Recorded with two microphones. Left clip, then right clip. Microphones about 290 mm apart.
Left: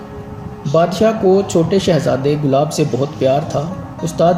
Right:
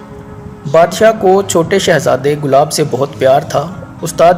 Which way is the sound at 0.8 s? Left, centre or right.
Right.